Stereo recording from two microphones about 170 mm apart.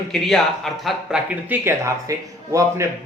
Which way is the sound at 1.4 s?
15° right (ahead or behind).